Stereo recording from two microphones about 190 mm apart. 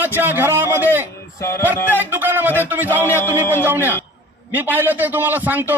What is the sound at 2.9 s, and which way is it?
Music, 10° left (ahead or behind).